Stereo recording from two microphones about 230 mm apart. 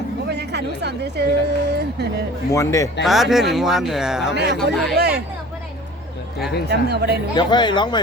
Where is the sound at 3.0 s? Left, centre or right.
Centre.